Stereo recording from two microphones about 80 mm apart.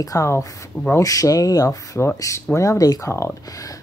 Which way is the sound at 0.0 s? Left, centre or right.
Left.